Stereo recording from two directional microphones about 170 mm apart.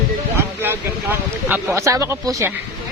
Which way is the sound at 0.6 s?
10° right (ahead or behind).